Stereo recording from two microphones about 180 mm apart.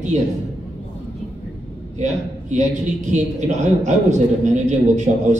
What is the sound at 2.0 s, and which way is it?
A man's voice, 40° right (ahead or behind).